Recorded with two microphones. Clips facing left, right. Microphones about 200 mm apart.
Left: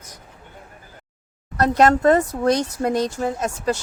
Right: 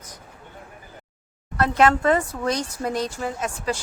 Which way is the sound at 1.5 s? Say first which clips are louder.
Left 3 dB; 40° left (ahead or behind).